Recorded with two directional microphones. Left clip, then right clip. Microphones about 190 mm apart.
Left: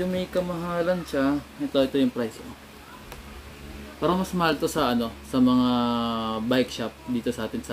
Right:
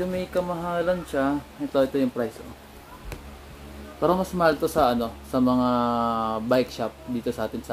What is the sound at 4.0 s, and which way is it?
Speech, 10° left (ahead or behind).